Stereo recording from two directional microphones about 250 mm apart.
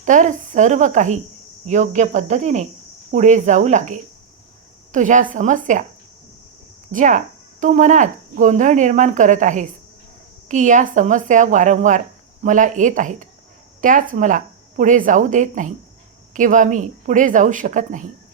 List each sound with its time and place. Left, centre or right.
0.0 s speech: right
6.9 s speech: right